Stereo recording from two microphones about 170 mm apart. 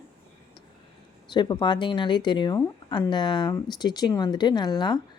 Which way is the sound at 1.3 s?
25° left (ahead or behind).